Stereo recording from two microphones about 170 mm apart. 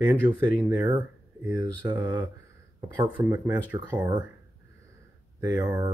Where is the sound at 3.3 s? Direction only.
15° right (ahead or behind).